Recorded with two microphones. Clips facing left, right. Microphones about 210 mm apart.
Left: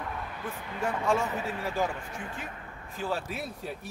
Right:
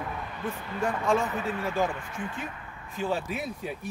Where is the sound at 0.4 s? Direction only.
5° left (ahead or behind).